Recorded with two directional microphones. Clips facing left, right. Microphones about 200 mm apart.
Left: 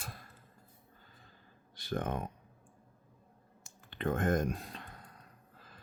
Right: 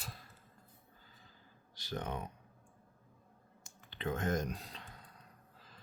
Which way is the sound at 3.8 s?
55° left (ahead or behind).